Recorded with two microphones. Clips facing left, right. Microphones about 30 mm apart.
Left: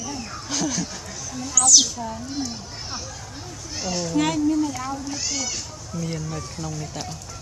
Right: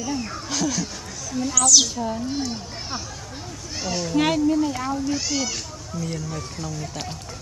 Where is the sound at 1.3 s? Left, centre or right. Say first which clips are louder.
Right 1 dB; centre.